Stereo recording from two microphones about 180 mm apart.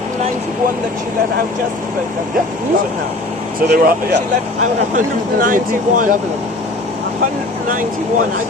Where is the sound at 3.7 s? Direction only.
60° right (ahead or behind).